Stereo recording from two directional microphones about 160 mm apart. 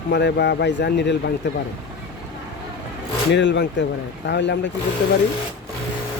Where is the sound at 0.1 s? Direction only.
90° left.